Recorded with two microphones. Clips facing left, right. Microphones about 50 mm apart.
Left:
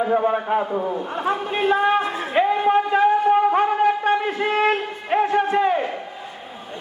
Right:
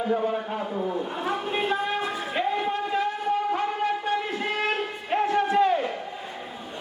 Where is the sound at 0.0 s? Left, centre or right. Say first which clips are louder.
Left 6 dB; left.